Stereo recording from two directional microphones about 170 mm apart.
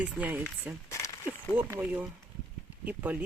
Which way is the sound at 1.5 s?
10° right (ahead or behind).